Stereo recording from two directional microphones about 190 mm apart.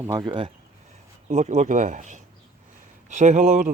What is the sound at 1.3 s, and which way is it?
Speech, 40° right (ahead or behind).